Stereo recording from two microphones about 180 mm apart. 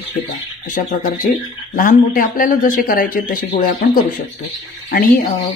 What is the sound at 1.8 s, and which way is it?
A woman's voice, 50° left (ahead or behind).